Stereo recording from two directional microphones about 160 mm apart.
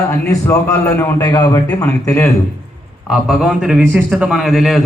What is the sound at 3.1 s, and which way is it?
A man's voice, centre (ahead or behind).